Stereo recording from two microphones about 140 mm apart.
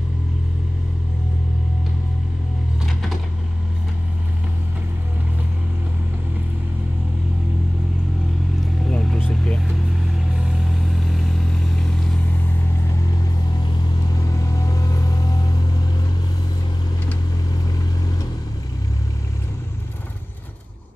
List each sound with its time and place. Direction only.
2.8 s a sound: centre (ahead or behind)
8.9 s vehicle: 10° left (ahead or behind)
11.1 s vehicle: centre (ahead or behind)
14.2 s vehicle: 25° left (ahead or behind)